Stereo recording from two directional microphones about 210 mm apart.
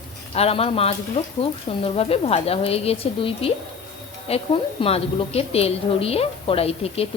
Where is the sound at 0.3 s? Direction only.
30° left (ahead or behind).